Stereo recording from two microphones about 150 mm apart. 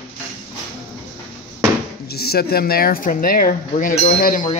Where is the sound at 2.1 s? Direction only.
90° left; by 4.4 s 75° left (ahead or behind).